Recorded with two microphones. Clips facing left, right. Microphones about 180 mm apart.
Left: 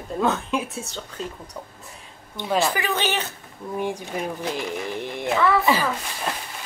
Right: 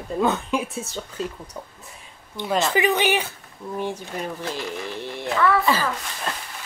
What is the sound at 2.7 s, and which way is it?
Speech, 15° right (ahead or behind).